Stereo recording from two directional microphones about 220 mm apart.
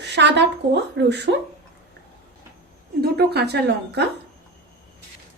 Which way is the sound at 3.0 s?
45° right (ahead or behind).